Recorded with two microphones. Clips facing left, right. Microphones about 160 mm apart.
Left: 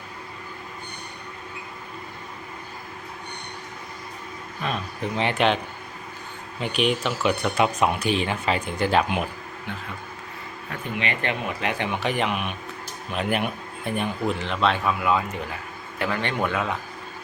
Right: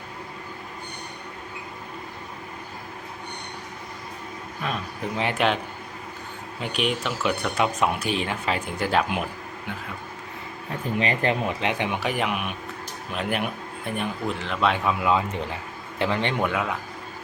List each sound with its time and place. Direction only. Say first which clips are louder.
4.6 s speech: left 1 dB; 5° right (ahead or behind)
6.6 s speech: left 3 dB; centre (ahead or behind)
10.7 s speech: right 3 dB; 35° right (ahead or behind)
11.6 s a man's voice: even; 20° right (ahead or behind)
16.4 s speech: even; 10° right (ahead or behind)